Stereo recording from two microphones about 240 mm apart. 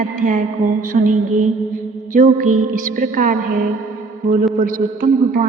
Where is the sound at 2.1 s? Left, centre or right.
Right.